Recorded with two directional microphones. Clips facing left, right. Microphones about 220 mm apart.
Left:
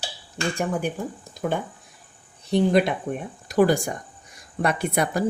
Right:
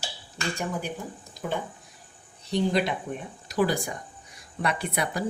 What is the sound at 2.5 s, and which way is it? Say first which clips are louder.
Speech: left 5 dB; 55° left (ahead or behind).